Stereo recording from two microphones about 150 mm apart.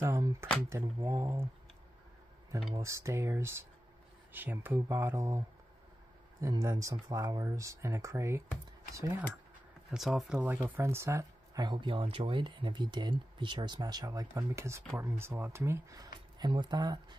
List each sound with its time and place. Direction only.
0.0 s speech: 20° right (ahead or behind)
2.7 s speech: 20° right (ahead or behind)
6.4 s speech: 20° right (ahead or behind)
9.8 s speech: centre (ahead or behind); by 17.0 s 25° right (ahead or behind)